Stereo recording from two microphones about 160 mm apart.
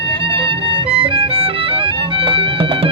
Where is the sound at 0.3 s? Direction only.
35° right (ahead or behind).